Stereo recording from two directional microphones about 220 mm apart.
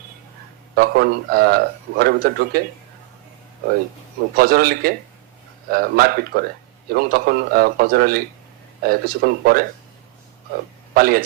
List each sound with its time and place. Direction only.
0.8 s a man's voice: 45° right (ahead or behind)
4.4 s a man's voice: 45° right (ahead or behind)
10.9 s a man's voice: 45° right (ahead or behind)